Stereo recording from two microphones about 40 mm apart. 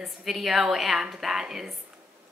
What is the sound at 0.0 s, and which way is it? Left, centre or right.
A woman's voice, centre.